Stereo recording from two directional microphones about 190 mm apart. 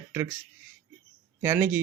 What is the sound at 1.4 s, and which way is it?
Speech, 10° right (ahead or behind).